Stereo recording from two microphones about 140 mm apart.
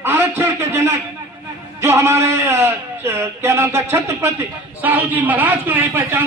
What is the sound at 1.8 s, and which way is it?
A man's voice, 15° right (ahead or behind).